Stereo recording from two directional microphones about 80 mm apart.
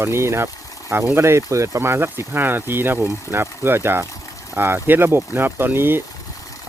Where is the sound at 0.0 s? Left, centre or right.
Right.